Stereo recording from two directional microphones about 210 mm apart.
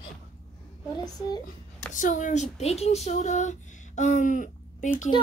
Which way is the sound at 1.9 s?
35° left (ahead or behind).